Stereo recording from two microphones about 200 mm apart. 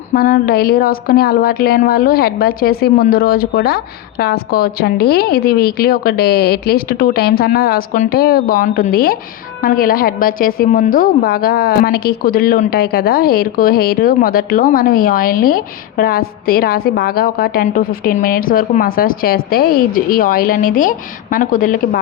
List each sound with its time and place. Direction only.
0.1 s a woman's voice: 45° left (ahead or behind)